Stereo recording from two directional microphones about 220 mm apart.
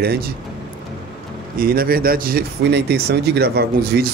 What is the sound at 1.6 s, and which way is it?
Speech, 40° right (ahead or behind).